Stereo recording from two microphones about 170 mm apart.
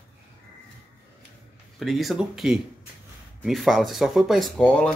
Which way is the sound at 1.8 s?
Centre (ahead or behind).